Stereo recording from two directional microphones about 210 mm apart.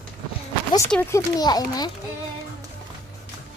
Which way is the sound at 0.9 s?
10° left (ahead or behind).